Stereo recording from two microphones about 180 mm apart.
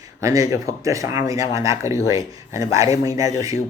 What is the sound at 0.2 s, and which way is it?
A man's voice, 15° right (ahead or behind).